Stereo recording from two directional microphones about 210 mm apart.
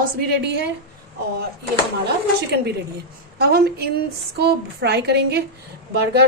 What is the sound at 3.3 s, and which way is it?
A woman's voice, 50° right (ahead or behind).